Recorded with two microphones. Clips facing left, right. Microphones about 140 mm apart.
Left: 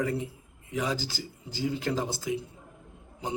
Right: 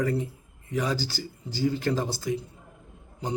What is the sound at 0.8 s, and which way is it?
A man's voice, 20° left (ahead or behind).